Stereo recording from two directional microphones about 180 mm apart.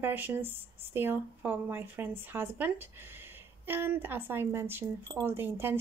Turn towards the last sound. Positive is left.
turn(degrees=-10)  # may be behind; listen again after turning